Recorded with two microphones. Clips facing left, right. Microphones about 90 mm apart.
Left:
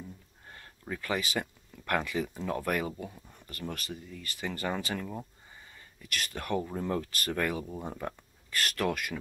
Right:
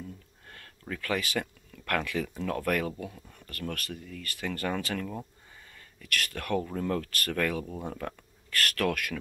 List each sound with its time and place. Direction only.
0.5 s speech: 20° left (ahead or behind)